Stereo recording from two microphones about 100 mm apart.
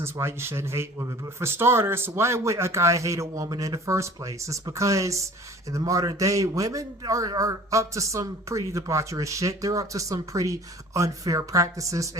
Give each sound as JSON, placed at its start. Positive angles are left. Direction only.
{"t": 0.0, "sound": "a man's voice", "side_deg": -25}